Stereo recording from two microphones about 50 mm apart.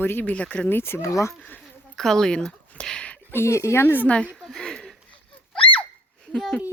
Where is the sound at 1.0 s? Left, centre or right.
Left.